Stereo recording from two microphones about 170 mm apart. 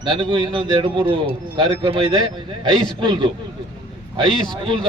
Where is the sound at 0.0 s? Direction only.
30° right (ahead or behind).